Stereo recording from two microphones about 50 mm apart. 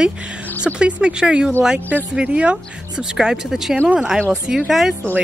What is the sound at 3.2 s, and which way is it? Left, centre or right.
Speech, centre.